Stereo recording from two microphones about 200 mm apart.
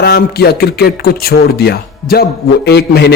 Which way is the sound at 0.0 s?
50° left (ahead or behind).